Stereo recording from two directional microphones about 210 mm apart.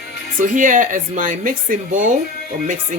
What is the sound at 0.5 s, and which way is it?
Speech, 40° right (ahead or behind).